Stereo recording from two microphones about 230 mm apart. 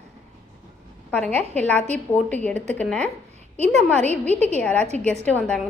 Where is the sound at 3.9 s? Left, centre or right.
Right.